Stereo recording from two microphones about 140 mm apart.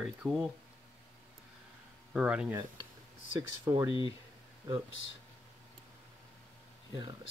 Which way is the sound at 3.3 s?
30° right (ahead or behind).